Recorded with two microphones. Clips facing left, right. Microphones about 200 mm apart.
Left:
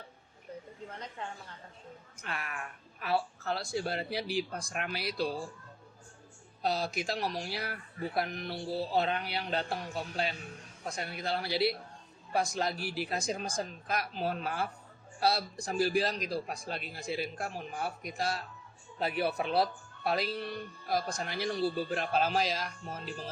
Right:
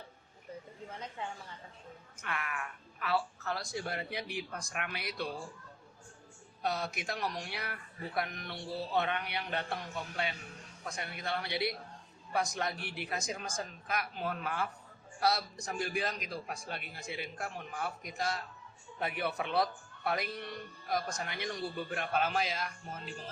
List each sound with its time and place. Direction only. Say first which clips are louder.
2.2 s a woman's voice: right 1 dB; 30° left (ahead or behind)
6.6 s speech: left 3 dB; 30° left (ahead or behind)